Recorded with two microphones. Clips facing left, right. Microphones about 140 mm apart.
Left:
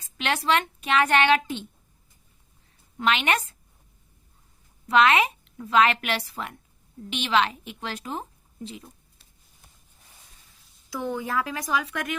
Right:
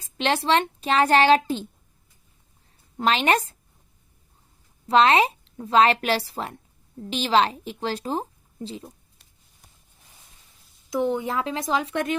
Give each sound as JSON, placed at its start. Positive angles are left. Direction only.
{"t": 0.2, "sound": "a woman's voice", "side_deg": -30}
{"t": 3.0, "sound": "a woman's voice", "side_deg": -35}
{"t": 4.9, "sound": "a woman's voice", "side_deg": -30}
{"t": 10.8, "sound": "speech", "side_deg": -20}